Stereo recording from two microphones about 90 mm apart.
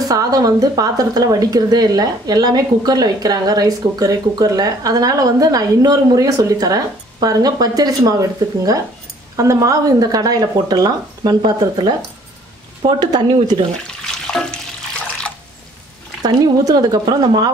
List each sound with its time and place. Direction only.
0.1 s speech: 45° right (ahead or behind)
14.0 s water: 5° left (ahead or behind)
16.2 s speech: 45° right (ahead or behind)